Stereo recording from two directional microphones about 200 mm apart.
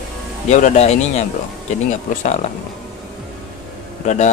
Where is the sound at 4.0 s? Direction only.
35° left (ahead or behind).